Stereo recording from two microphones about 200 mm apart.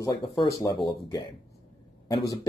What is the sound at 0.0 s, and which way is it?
Speech, 25° left (ahead or behind).